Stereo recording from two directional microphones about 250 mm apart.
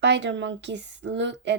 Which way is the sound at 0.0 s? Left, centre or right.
Right.